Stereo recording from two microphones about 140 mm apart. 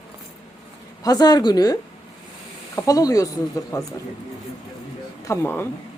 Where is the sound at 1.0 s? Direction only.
30° left (ahead or behind).